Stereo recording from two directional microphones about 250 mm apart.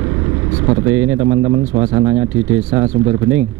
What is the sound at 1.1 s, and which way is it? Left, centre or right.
A man's voice, centre.